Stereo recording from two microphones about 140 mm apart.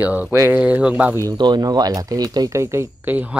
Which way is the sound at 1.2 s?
30° right (ahead or behind).